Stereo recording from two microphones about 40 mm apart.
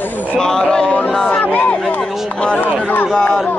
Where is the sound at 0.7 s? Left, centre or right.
Left.